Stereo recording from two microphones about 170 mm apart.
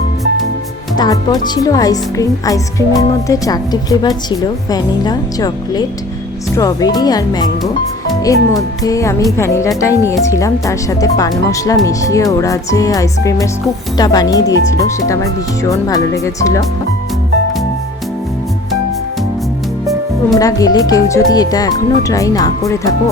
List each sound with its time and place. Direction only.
0.9 s a woman's voice: 20° left (ahead or behind)
20.4 s a woman's voice: 20° left (ahead or behind)